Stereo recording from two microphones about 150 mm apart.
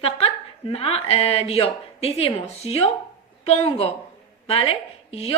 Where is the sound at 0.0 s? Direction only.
40° left (ahead or behind).